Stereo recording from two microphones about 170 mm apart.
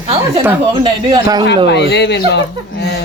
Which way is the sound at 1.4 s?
80° left.